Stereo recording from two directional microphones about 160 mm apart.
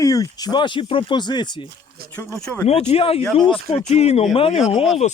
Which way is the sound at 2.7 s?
40° left (ahead or behind).